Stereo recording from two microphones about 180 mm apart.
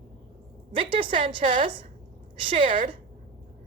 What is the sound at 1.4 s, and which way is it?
A woman's voice, 40° right (ahead or behind).